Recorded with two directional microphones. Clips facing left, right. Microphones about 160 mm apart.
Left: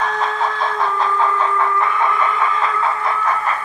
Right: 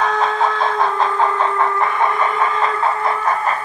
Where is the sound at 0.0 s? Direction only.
20° right (ahead or behind).